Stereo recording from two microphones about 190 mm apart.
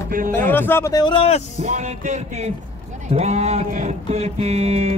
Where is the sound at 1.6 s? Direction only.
40° right (ahead or behind).